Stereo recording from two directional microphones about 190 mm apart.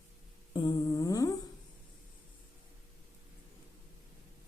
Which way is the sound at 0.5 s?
20° left (ahead or behind).